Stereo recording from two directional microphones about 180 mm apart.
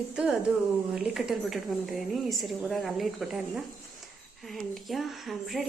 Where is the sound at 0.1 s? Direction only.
5° right (ahead or behind).